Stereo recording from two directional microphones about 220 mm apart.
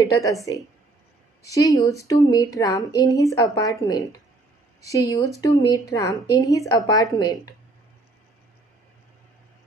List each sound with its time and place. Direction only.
0.0 s speech: 15° left (ahead or behind)
1.5 s speech: 15° left (ahead or behind)